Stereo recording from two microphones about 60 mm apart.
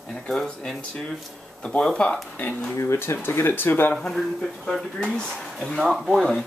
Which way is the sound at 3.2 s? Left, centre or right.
Left.